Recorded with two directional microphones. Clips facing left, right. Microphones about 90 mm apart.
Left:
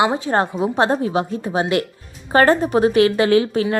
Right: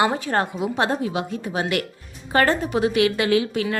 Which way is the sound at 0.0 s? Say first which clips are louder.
Left 3 dB; 20° left (ahead or behind).